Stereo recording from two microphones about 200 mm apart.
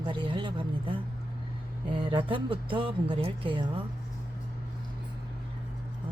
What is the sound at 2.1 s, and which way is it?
Speech, 25° right (ahead or behind).